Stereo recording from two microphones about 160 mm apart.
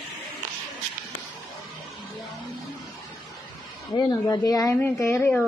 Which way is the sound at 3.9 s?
25° left (ahead or behind).